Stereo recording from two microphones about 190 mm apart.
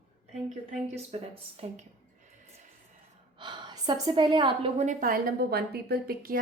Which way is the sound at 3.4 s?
25° right (ahead or behind).